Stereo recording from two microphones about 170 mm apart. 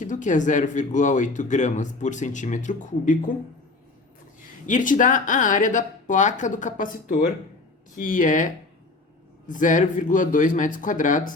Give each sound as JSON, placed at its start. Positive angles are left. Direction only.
{"t": 0.0, "sound": "speech", "side_deg": 50}
{"t": 4.6, "sound": "speech", "side_deg": 50}